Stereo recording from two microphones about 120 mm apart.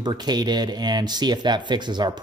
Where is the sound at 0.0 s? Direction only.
35° right (ahead or behind).